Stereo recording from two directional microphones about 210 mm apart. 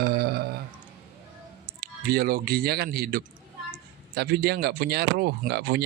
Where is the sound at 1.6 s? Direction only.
45° right (ahead or behind).